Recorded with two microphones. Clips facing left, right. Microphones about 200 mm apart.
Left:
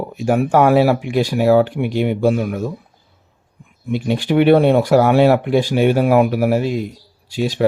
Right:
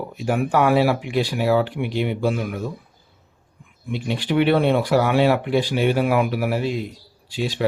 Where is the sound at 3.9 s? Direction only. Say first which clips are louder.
Left 5 dB; 45° left (ahead or behind).